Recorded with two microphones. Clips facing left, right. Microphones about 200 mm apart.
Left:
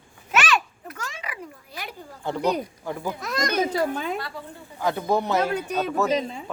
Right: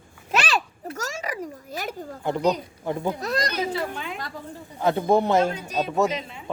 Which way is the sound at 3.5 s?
45° left (ahead or behind).